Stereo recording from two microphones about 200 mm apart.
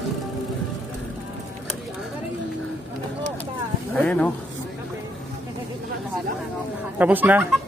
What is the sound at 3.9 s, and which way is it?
Speech, 5° left (ahead or behind).